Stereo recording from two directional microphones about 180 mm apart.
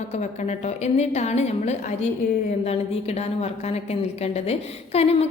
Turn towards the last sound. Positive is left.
turn(degrees=35)  # may be behind; listen again after turning